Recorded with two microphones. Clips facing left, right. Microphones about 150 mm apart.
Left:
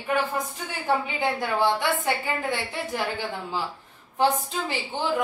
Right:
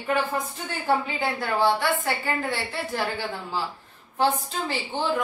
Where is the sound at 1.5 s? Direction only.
15° left (ahead or behind).